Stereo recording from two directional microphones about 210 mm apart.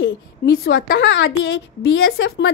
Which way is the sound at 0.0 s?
65° left (ahead or behind).